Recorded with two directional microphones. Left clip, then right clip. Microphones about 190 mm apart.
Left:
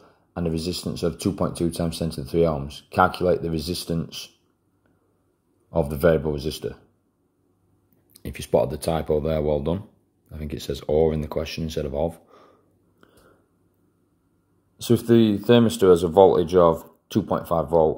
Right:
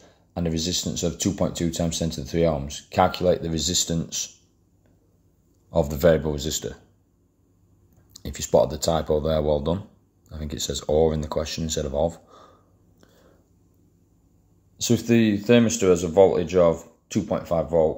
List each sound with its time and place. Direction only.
0.0 s speech: 20° left (ahead or behind)
5.7 s speech: 20° left (ahead or behind)
8.1 s speech: 20° left (ahead or behind)
14.8 s speech: 20° left (ahead or behind)